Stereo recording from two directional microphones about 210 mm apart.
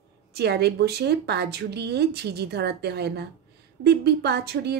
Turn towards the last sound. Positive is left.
turn(degrees=-50)  # may be behind; listen again after turning